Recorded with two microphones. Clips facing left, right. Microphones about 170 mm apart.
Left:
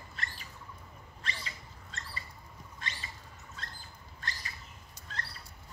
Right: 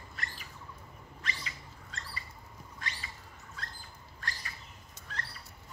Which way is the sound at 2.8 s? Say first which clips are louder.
Even; 25° left (ahead or behind).